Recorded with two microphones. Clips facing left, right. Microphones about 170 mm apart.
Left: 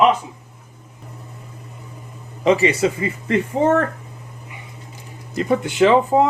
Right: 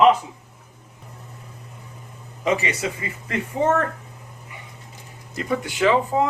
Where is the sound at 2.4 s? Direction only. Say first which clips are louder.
Left 7 dB; 30° left (ahead or behind).